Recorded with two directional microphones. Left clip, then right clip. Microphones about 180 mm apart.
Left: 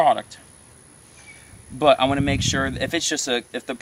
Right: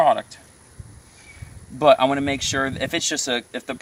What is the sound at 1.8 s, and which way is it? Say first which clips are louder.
Speech: right 1 dB; 15° right (ahead or behind).